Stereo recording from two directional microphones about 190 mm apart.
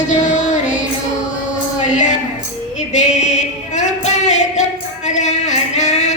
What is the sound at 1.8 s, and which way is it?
Music, 40° left (ahead or behind).